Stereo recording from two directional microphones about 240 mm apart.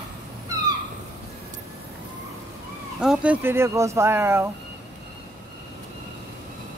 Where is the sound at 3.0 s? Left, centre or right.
Centre.